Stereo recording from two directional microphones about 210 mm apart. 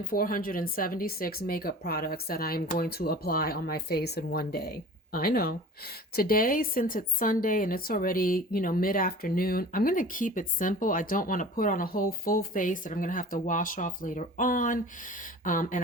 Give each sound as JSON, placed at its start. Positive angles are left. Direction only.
{"t": 0.0, "sound": "speech", "side_deg": 45}